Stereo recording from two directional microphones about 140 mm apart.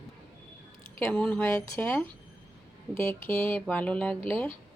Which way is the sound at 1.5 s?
20° left (ahead or behind).